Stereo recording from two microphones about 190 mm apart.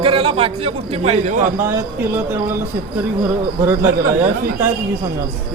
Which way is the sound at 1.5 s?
15° right (ahead or behind).